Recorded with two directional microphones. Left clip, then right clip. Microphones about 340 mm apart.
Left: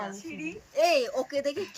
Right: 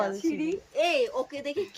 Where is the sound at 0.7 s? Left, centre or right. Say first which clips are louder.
Left 2 dB; centre.